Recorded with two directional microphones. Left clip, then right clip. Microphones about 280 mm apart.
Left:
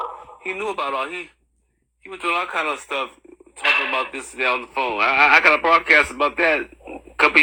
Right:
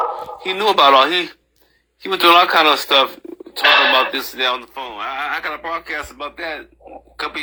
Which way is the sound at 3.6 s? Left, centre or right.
Centre.